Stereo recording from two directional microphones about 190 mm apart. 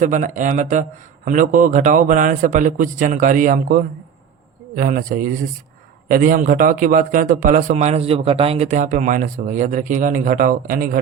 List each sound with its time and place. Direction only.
0.0 s a man's voice: 40° right (ahead or behind)
6.1 s a man's voice: 45° right (ahead or behind)